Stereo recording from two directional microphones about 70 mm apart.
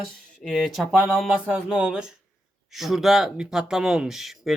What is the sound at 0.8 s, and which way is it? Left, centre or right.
Speech, centre.